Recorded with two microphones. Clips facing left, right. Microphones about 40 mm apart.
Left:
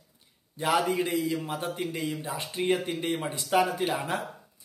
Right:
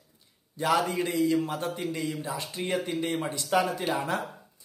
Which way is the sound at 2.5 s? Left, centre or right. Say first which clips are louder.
Left 3 dB; left.